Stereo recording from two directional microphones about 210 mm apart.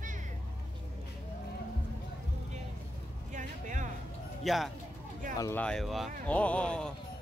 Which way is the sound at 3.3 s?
35° right (ahead or behind).